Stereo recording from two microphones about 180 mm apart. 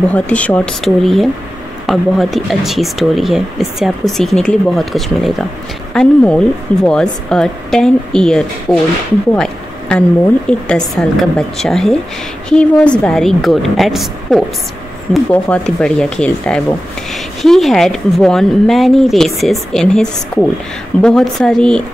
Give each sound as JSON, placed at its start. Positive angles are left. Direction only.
{"t": 0.1, "sound": "speech", "side_deg": 10}